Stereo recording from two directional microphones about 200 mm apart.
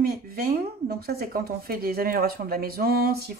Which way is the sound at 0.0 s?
50° right (ahead or behind).